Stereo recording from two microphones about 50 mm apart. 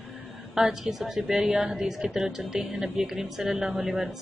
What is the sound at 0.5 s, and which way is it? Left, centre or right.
A woman's voice, centre.